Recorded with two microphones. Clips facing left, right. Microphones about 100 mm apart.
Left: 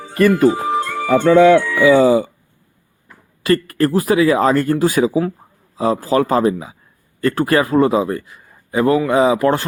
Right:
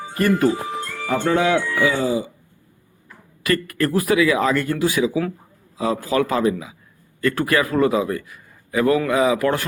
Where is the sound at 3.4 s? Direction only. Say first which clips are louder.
Left 5 dB; 30° left (ahead or behind).